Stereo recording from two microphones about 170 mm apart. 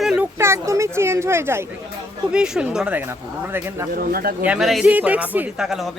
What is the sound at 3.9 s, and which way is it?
Speech, 60° right (ahead or behind).